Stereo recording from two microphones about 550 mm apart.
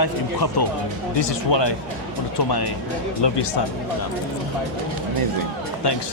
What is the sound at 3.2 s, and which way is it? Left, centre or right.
Speech, left.